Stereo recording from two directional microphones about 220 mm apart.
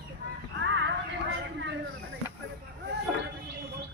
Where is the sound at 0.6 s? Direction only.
55° right (ahead or behind).